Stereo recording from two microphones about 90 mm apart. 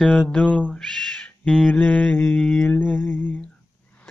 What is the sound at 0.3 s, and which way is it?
Speech, 15° left (ahead or behind).